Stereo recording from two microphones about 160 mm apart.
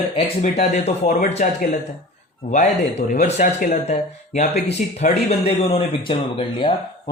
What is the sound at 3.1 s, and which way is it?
Speech, 45° left (ahead or behind).